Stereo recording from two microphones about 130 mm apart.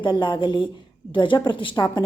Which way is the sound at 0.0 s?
35° left (ahead or behind).